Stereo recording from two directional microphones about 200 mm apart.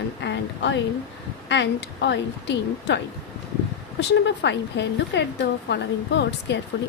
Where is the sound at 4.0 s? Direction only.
60° left (ahead or behind).